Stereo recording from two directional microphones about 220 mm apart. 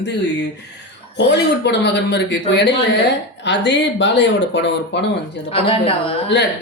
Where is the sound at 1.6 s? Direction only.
50° left (ahead or behind).